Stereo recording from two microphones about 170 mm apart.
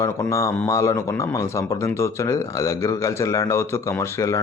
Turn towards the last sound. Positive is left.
turn(degrees=15)  # may be behind; listen again after turning